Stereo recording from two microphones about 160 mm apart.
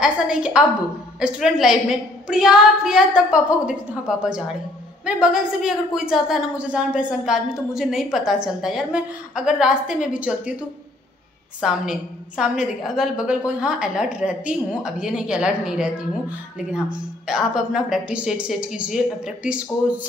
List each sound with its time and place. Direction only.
0.0 s a woman's voice: 5° right (ahead or behind)
11.6 s a woman's voice: 5° right (ahead or behind)